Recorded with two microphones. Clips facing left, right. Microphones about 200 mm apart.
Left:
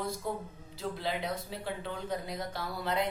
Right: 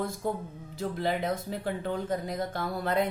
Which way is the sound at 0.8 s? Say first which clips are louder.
Right 5 dB; 50° right (ahead or behind).